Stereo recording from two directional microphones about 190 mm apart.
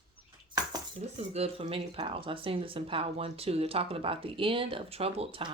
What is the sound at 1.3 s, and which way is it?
Speech, 35° right (ahead or behind).